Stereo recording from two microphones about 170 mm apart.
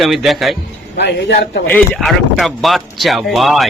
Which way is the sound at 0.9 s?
90° left.